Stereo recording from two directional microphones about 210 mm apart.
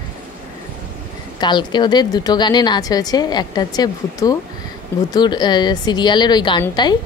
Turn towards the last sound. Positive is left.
turn(degrees=20)  # may be behind; listen again after turning